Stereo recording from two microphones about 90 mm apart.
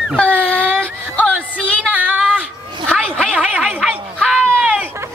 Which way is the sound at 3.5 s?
10° right (ahead or behind).